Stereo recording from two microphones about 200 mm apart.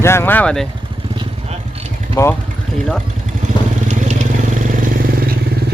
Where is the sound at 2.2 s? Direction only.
15° left (ahead or behind).